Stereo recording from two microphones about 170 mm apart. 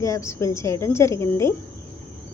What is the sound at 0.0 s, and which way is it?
Speech, 20° left (ahead or behind).